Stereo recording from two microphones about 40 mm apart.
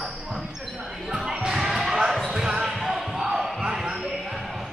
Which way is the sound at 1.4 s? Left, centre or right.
Centre.